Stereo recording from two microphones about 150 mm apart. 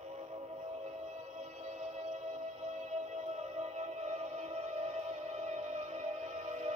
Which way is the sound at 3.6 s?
50° right (ahead or behind).